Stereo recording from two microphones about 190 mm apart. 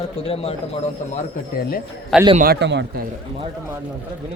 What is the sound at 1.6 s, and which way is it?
Speech, 50° left (ahead or behind).